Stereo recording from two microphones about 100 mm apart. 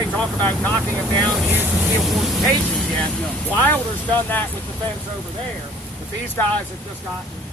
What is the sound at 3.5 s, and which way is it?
Speech, 15° left (ahead or behind).